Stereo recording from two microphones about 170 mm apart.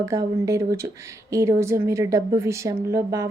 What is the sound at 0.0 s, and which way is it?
Speech, 20° right (ahead or behind).